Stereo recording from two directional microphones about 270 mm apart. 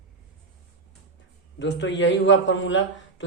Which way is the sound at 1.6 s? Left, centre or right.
Left.